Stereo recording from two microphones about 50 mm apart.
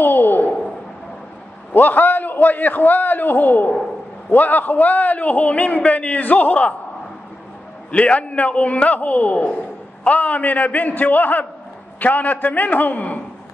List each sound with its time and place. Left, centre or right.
0.0 s a sound: left
1.7 s a man's voice: left
7.9 s a man's voice: left